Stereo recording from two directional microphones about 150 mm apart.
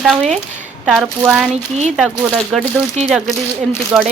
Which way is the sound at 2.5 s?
5° right (ahead or behind).